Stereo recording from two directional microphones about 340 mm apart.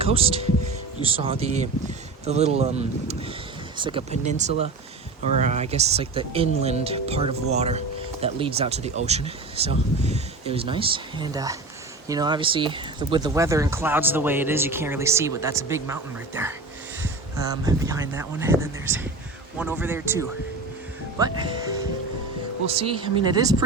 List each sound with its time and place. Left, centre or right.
0.0 s speech: centre
22.7 s speech: centre